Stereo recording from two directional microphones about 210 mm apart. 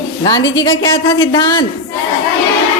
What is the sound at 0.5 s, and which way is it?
A woman's voice, 25° left (ahead or behind).